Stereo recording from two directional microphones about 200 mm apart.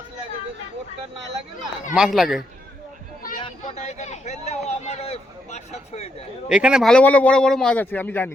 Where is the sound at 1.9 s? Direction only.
5° right (ahead or behind).